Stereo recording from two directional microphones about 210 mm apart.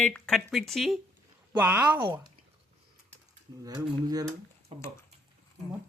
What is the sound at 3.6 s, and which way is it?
Speech, 15° right (ahead or behind).